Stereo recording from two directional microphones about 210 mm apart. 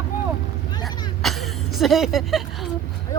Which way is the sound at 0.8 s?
Centre (ahead or behind).